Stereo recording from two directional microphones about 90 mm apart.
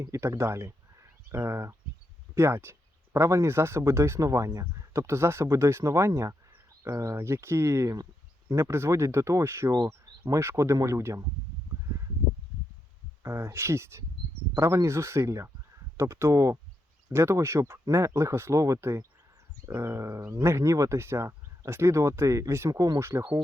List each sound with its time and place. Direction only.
0.0 s speech: 30° right (ahead or behind)
9.7 s speech: 50° right (ahead or behind)
10.2 s speech: 30° right (ahead or behind)
13.2 s speech: 30° right (ahead or behind)